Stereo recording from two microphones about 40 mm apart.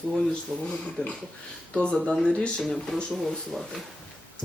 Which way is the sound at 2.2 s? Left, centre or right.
Left.